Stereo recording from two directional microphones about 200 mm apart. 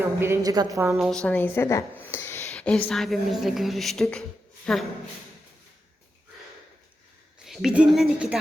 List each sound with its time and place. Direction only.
0.0 s a woman's voice: 10° right (ahead or behind)
0.9 s a woman's voice: centre (ahead or behind)
7.4 s a woman's voice: centre (ahead or behind)